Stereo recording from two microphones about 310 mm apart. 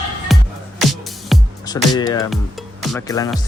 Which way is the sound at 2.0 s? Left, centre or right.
Centre.